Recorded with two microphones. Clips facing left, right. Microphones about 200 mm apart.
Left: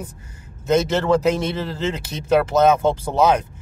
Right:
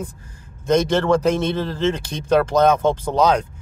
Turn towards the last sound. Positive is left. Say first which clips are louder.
# even
turn(degrees=5)  # may be behind; listen again after turning